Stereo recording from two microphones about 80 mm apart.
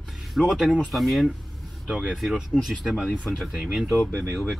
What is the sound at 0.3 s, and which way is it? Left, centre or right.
Speech, centre.